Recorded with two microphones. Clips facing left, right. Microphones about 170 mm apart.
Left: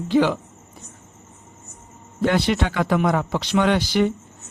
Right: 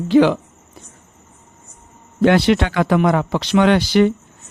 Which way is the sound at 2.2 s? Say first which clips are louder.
Right 6 dB; 80° right.